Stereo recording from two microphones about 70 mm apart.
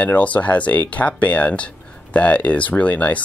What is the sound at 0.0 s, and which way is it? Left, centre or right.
Speech, left.